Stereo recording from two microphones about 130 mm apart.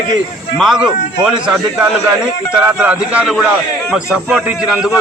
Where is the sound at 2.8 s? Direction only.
10° right (ahead or behind).